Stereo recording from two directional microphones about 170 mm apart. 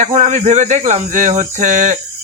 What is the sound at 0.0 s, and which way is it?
Speech, 45° right (ahead or behind).